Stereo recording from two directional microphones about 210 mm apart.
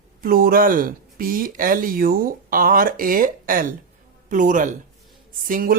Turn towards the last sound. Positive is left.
turn(degrees=-40)  # may be behind; listen again after turning